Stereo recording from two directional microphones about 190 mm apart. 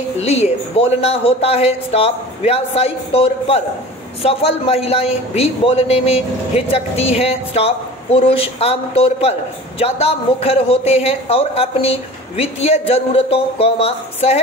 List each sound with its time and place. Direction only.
0.2 s a man's voice: 35° left (ahead or behind)